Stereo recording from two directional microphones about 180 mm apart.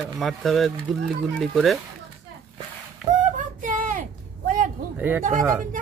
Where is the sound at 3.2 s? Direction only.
45° right (ahead or behind).